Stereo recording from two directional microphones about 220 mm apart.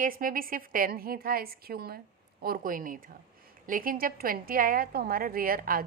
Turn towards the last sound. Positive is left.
turn(degrees=-40)  # may be behind; listen again after turning